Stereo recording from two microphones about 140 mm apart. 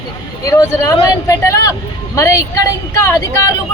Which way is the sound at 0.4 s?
20° left (ahead or behind).